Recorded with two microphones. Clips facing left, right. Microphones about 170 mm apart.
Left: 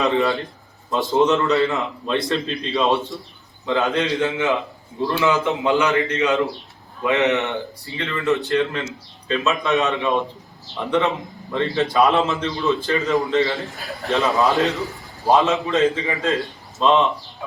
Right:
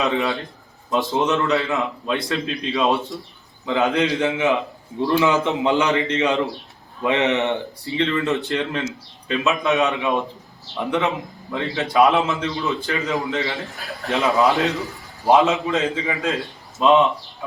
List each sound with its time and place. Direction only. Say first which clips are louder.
0.0 s a man's voice: left 2 dB; centre (ahead or behind)
3.8 s a man's voice: right 1 dB; 20° right (ahead or behind)
15.6 s a man's voice: left 3 dB; centre (ahead or behind)